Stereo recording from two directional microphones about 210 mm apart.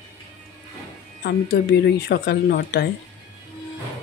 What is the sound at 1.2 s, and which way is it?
Speech, 50° left (ahead or behind).